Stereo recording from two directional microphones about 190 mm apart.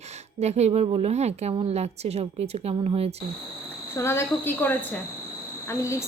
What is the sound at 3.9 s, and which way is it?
Speech, 10° left (ahead or behind).